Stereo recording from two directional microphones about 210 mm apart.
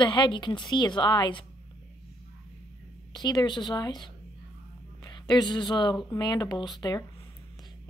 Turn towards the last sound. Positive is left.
turn(degrees=20)  # may be behind; listen again after turning